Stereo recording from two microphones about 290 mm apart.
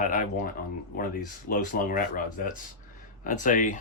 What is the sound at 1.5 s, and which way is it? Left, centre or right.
Speech, left.